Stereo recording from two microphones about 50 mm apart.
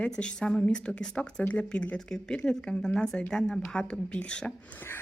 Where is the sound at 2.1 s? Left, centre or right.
Centre.